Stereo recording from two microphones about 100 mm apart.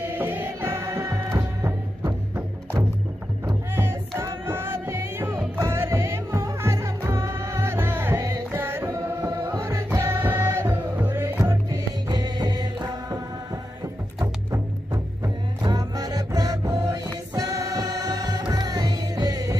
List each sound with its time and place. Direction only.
0.1 s music: 20° right (ahead or behind)
4.2 s music: 25° right (ahead or behind)
12.1 s music: 45° right (ahead or behind)
15.6 s music: 45° right (ahead or behind)